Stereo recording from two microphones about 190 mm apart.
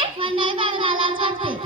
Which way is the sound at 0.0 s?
25° right (ahead or behind).